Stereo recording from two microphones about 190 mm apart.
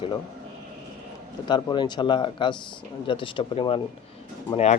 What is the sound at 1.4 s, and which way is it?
Speech, 25° left (ahead or behind).